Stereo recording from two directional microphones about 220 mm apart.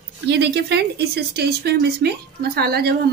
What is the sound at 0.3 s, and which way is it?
Speech, 50° right (ahead or behind).